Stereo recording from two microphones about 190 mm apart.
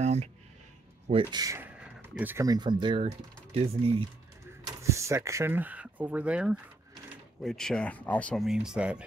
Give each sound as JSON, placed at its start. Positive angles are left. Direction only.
{"t": 0.0, "sound": "music", "side_deg": -35}
{"t": 1.3, "sound": "speech", "side_deg": -15}
{"t": 4.6, "sound": "speech", "side_deg": -15}